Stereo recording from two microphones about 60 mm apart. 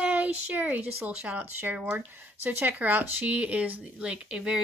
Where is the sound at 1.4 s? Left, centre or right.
Right.